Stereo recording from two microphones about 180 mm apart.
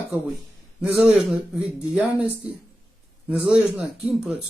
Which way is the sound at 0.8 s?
5° right (ahead or behind).